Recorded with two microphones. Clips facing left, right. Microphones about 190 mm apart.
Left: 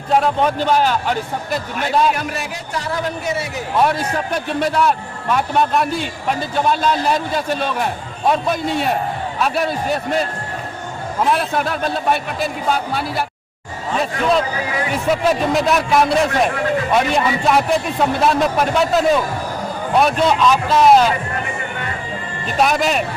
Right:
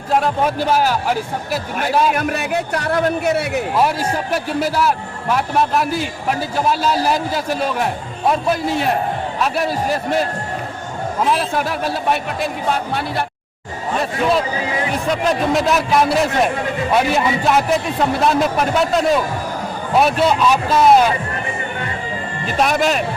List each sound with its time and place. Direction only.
0.1 s a man's voice: 5° right (ahead or behind)
2.1 s a man's voice: 55° right (ahead or behind)
3.8 s a man's voice: 5° right (ahead or behind)
11.3 s a man's voice: centre (ahead or behind)
22.6 s a man's voice: centre (ahead or behind)